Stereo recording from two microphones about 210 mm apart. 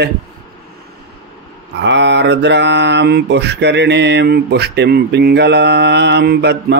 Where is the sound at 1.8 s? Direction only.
55° right (ahead or behind).